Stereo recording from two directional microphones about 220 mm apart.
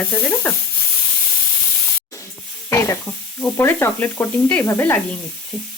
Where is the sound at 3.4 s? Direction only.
10° left (ahead or behind).